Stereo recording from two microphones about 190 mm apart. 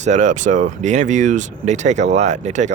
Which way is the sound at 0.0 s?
40° right (ahead or behind).